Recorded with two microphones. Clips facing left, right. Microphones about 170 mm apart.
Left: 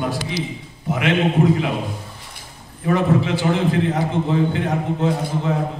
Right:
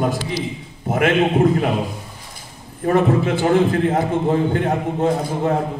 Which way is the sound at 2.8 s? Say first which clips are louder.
Right 2 dB; 50° right (ahead or behind).